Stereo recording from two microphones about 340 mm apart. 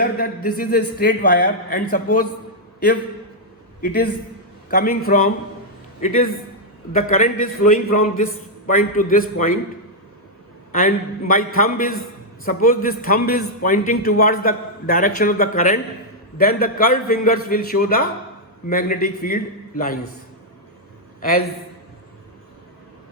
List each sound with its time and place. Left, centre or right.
0.2 s a man's voice: left
3.8 s a man's voice: left
10.7 s a man's voice: left
21.2 s a man's voice: left